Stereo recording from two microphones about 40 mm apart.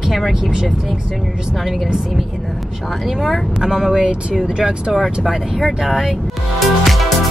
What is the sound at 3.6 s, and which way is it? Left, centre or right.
Speech, centre.